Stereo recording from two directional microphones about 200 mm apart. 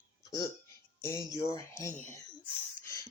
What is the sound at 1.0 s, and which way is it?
Speech, 15° left (ahead or behind).